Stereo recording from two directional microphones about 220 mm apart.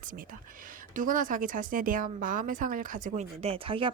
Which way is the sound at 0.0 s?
40° right (ahead or behind).